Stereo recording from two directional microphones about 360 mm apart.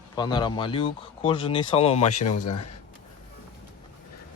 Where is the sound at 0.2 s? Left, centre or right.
Centre.